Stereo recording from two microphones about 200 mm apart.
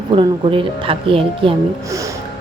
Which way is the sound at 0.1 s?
25° right (ahead or behind).